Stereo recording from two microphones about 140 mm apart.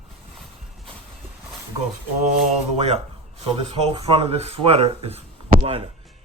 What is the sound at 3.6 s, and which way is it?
Speech, 40° right (ahead or behind).